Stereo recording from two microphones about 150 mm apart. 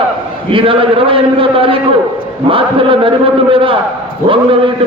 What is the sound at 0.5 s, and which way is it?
A man's voice, 35° right (ahead or behind).